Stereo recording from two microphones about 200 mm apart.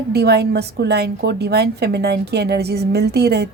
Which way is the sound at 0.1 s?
55° right (ahead or behind).